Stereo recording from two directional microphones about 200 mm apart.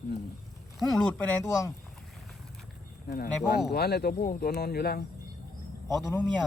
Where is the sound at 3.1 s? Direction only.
55° left (ahead or behind).